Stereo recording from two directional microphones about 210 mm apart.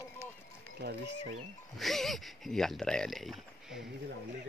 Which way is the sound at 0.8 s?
50° right (ahead or behind).